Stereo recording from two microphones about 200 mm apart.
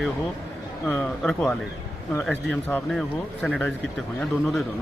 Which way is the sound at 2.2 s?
5° left (ahead or behind).